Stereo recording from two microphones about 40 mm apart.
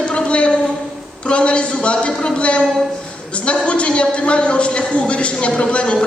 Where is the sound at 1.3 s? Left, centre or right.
Left.